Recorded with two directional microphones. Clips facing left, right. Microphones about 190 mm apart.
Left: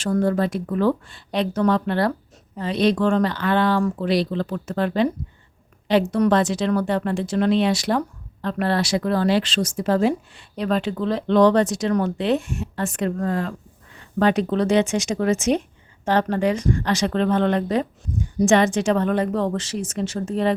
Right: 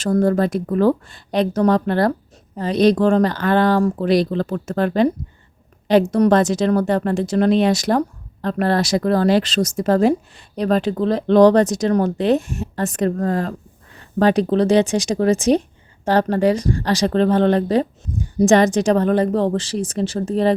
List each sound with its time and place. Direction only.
0.0 s speech: 40° right (ahead or behind)